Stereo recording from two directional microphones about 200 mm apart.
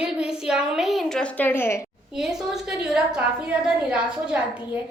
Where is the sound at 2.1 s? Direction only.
Centre (ahead or behind).